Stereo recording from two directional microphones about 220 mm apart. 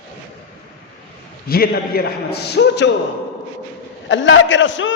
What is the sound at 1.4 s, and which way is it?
A man's voice, 45° left (ahead or behind).